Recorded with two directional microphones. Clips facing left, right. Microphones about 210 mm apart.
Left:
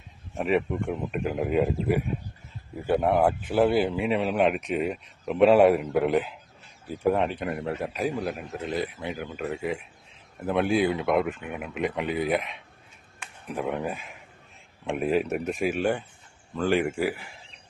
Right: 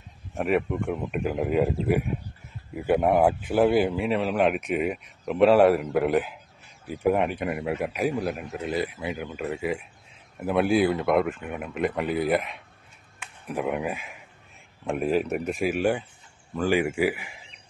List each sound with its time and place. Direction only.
0.3 s a man's voice: centre (ahead or behind)
2.7 s a man's voice: 10° right (ahead or behind)
3.9 s a man's voice: centre (ahead or behind)